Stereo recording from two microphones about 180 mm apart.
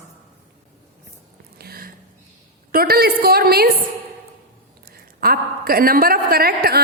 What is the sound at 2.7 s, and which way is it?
A woman's voice, 55° right (ahead or behind).